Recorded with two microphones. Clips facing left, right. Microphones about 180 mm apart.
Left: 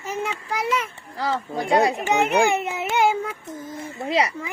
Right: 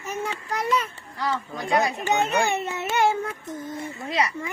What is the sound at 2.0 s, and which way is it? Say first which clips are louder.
A child's voice: left 3 dB; 15° left (ahead or behind).